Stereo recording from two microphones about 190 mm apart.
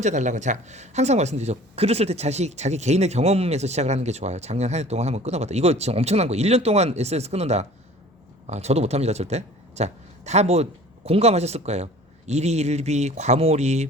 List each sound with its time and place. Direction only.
0.0 s speech: 40° right (ahead or behind)